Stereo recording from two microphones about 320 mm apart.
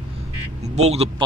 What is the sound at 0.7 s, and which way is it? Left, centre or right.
Speech, centre.